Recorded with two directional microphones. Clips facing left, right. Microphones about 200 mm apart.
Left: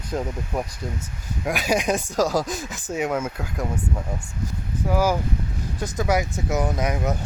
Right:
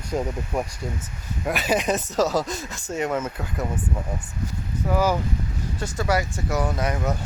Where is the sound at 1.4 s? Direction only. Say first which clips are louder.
Even; centre (ahead or behind).